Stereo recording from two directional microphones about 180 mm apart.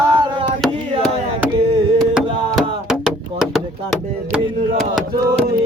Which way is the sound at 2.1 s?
5° right (ahead or behind).